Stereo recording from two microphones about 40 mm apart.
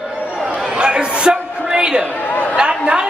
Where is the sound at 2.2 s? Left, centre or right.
Left.